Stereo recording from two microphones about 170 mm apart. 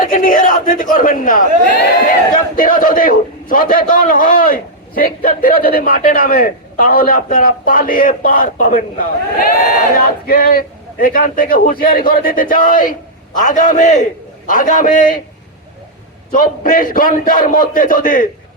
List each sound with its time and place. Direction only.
0.0 s a man's voice: 55° left (ahead or behind)
16.3 s a man's voice: 50° left (ahead or behind)